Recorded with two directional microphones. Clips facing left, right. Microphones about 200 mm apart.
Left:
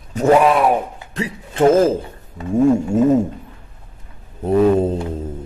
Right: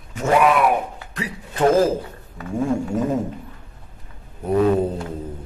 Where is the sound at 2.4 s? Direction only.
25° left (ahead or behind).